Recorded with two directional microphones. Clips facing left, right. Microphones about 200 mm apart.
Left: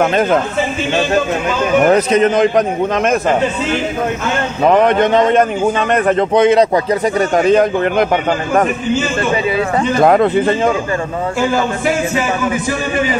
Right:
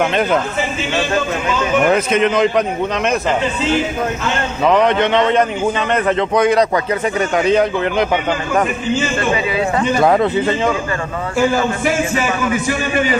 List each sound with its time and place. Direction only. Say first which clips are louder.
0.0 s a man's voice: left 3 dB; 45° left (ahead or behind)
1.8 s a man's voice: left 4 dB; 40° left (ahead or behind)
4.6 s a man's voice: left 2 dB; 50° left (ahead or behind)
6.3 s speech: left 3 dB; 25° left (ahead or behind)
6.9 s a man's voice: left 3 dB; 40° left (ahead or behind)
10.0 s a man's voice: left 4 dB; 50° left (ahead or behind)